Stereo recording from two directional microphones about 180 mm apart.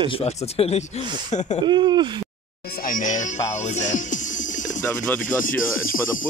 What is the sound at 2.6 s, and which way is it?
Music, 55° left (ahead or behind).